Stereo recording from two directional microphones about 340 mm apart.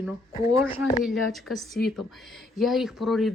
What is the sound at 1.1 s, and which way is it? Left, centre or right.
A woman's voice, centre.